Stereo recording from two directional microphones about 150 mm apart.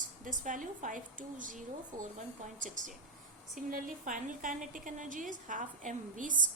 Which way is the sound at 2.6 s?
60° right (ahead or behind).